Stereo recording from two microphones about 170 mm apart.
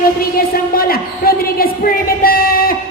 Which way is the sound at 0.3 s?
60° left (ahead or behind).